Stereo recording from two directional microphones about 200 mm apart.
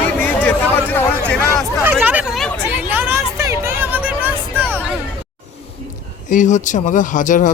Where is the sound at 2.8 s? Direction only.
10° right (ahead or behind).